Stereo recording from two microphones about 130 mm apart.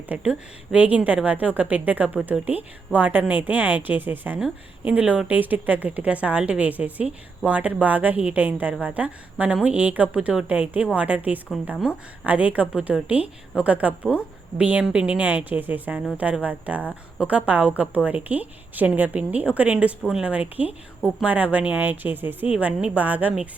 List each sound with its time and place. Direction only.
0.1 s a woman's voice: 10° right (ahead or behind)